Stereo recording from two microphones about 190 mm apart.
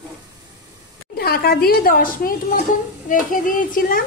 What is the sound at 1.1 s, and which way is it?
A woman's voice, 55° left (ahead or behind).